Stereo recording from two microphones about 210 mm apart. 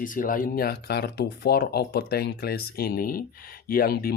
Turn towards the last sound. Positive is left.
turn(degrees=45)  # may be behind; listen again after turning